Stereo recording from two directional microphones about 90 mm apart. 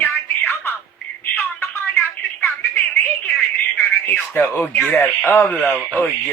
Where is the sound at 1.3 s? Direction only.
20° left (ahead or behind).